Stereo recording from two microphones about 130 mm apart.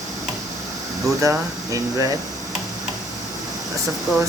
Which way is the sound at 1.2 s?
25° right (ahead or behind).